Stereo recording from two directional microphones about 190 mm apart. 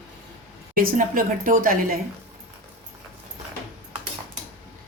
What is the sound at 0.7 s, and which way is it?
Speech, 45° right (ahead or behind).